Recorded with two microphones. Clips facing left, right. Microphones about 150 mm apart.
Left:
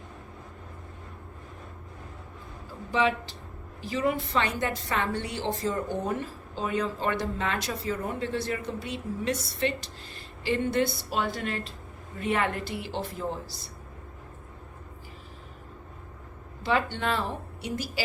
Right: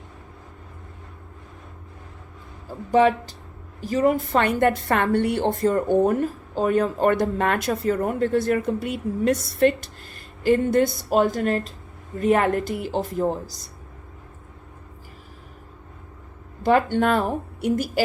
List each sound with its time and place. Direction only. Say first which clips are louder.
2.9 s a woman's voice: right 8 dB; 45° right (ahead or behind)
16.6 s a woman's voice: right 8 dB; 45° right (ahead or behind)